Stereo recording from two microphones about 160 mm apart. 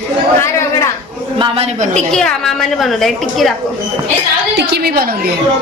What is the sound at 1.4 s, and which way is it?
Speech, 40° right (ahead or behind).